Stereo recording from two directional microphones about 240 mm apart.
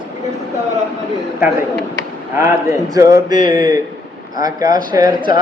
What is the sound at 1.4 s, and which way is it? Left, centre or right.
Speech, centre.